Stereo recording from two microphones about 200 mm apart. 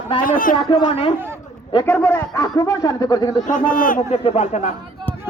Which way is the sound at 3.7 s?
40° left (ahead or behind).